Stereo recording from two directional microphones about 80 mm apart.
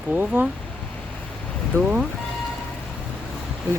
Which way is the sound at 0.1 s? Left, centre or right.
Right.